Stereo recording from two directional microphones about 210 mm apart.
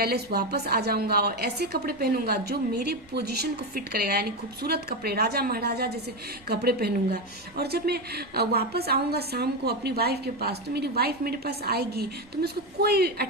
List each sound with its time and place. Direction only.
0.0 s a woman's voice: 45° right (ahead or behind)